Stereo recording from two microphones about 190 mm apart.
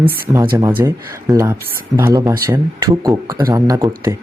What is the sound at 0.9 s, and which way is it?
Speech, 15° right (ahead or behind).